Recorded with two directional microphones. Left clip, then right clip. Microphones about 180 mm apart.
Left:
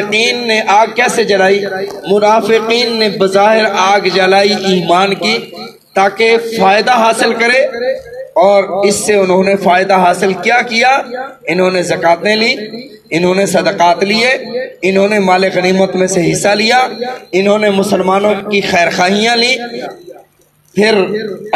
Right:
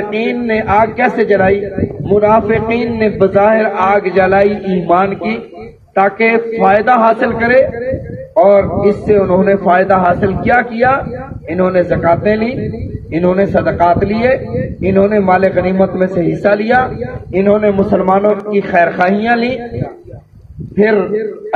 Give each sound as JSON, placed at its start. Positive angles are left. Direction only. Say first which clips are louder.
{"t": 0.1, "sound": "speech", "louder": "left 5 dB", "side_deg": 45}
{"t": 20.8, "sound": "speech", "louder": "left 1 dB", "side_deg": 45}